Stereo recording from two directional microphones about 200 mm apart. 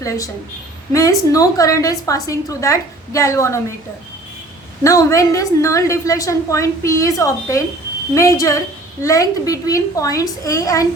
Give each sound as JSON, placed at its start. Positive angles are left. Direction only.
{"t": 0.0, "sound": "a woman's voice", "side_deg": 15}
{"t": 4.8, "sound": "a woman's voice", "side_deg": 15}